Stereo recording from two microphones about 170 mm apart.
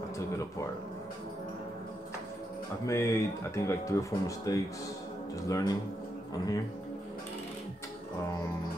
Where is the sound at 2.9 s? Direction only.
15° left (ahead or behind).